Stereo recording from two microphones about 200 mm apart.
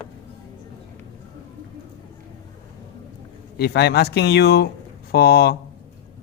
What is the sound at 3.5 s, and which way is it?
Speech, 55° left (ahead or behind).